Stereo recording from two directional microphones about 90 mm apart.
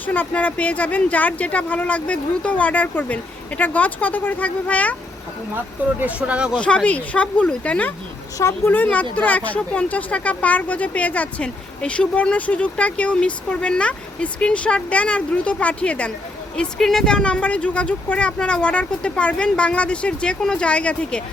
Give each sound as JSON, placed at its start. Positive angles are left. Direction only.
{"t": 0.0, "sound": "speech", "side_deg": 20}
{"t": 6.0, "sound": "speech", "side_deg": -15}
{"t": 6.6, "sound": "speech", "side_deg": 10}
{"t": 8.4, "sound": "a woman's voice", "side_deg": 35}
{"t": 8.7, "sound": "speech", "side_deg": 20}